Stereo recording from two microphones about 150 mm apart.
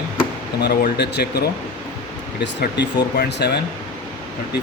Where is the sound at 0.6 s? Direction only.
90° left.